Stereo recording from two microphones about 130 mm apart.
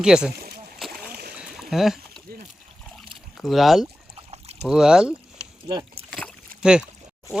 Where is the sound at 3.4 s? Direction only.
Centre (ahead or behind).